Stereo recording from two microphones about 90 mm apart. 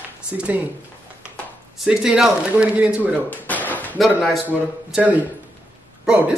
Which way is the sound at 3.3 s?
20° left (ahead or behind).